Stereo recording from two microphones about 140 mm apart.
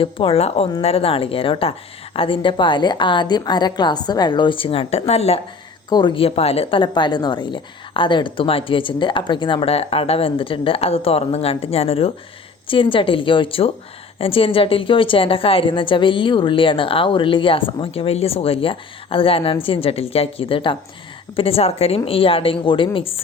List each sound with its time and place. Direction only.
0.0 s a woman's voice: 40° left (ahead or behind)
5.9 s a woman's voice: 30° left (ahead or behind)